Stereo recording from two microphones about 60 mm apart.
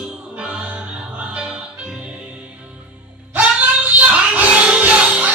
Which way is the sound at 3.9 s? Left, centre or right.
Right.